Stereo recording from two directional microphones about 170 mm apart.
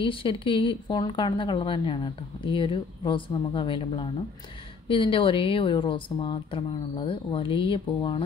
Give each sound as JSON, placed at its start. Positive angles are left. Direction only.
{"t": 0.0, "sound": "a woman's voice", "side_deg": 30}